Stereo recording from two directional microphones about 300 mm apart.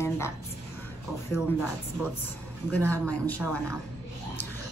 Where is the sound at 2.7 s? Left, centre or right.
Centre.